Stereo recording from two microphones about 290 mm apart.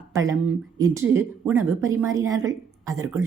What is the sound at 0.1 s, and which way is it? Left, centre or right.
Speech, centre.